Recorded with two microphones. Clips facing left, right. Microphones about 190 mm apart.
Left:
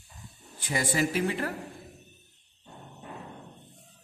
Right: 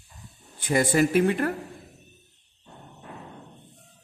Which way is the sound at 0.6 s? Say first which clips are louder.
Right 7 dB; 55° right (ahead or behind).